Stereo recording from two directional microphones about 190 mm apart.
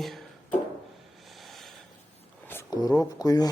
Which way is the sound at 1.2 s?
Centre (ahead or behind).